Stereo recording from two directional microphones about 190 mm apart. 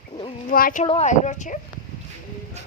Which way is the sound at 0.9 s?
35° left (ahead or behind).